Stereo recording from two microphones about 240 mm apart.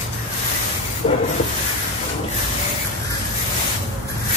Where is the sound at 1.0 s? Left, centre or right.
Left.